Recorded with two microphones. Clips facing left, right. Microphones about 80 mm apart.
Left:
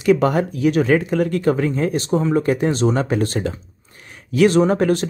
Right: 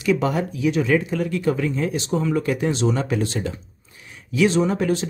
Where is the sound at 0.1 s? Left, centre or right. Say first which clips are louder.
Left 5 dB; left.